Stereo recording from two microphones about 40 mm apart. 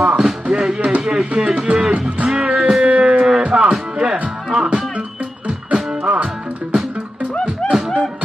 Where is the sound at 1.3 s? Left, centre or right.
Right.